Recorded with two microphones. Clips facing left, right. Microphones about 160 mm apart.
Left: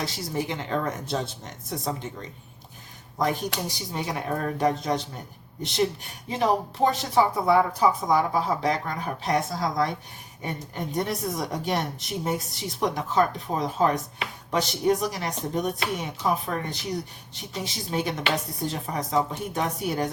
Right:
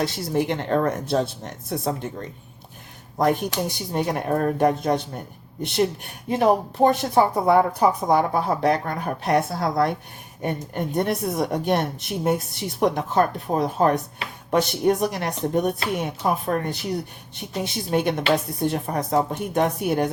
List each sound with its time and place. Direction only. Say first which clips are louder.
0.0 s a woman's voice: right 6 dB; 60° right (ahead or behind)